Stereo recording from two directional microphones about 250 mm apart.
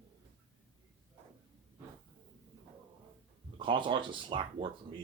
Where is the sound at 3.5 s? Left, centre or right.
Centre.